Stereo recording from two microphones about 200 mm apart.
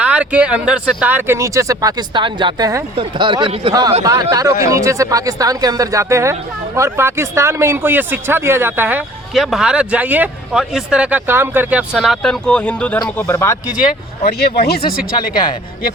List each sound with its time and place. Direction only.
0.0 s speech: 5° right (ahead or behind); by 13.6 s 15° left (ahead or behind)
14.3 s speech: 55° left (ahead or behind)